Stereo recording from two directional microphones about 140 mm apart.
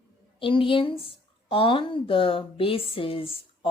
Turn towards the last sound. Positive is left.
turn(degrees=40)  # may be behind; listen again after turning